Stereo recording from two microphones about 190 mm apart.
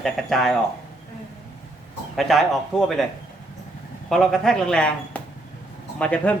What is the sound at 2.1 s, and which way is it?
Speech, centre (ahead or behind).